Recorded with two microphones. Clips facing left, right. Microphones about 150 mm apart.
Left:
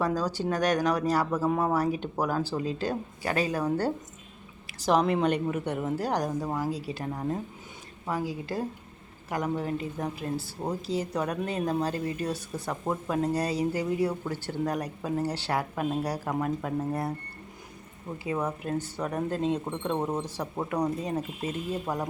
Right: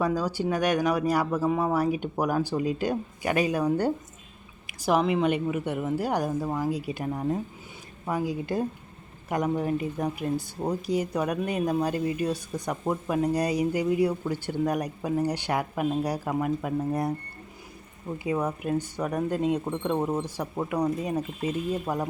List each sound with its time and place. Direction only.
0.0 s speech: 10° right (ahead or behind)
18.2 s speech: 15° right (ahead or behind)